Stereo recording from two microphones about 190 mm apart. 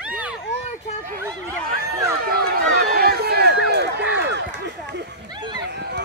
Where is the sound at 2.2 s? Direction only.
55° right (ahead or behind).